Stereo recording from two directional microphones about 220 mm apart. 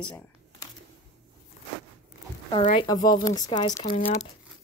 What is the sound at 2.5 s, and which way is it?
Speech, 25° left (ahead or behind).